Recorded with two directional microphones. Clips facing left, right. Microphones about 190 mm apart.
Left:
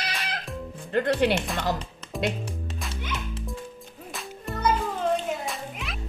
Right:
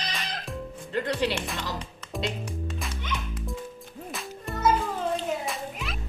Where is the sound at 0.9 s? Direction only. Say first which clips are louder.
Left 5 dB; 55° left (ahead or behind).